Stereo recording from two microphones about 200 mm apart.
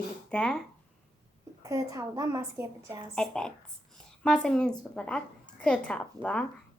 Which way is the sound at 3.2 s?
5° left (ahead or behind).